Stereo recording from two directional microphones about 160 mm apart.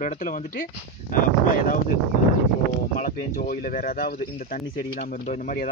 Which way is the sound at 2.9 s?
65° left (ahead or behind).